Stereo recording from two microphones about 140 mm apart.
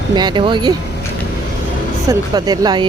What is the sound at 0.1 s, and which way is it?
Speech, 30° right (ahead or behind).